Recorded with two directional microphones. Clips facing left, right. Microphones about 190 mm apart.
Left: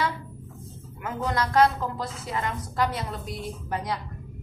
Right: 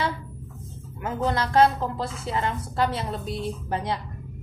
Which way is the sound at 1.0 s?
30° right (ahead or behind).